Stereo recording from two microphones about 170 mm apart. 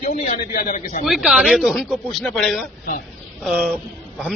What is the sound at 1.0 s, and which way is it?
Speech, 5° right (ahead or behind).